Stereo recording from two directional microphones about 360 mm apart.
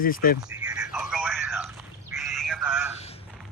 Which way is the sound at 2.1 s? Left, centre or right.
Centre.